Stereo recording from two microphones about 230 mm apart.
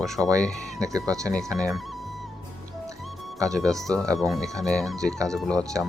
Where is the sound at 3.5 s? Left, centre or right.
Centre.